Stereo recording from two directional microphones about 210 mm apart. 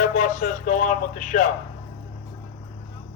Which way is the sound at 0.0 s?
40° left (ahead or behind).